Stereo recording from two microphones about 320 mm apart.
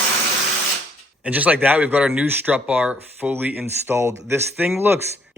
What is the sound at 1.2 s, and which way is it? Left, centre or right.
Speech, centre.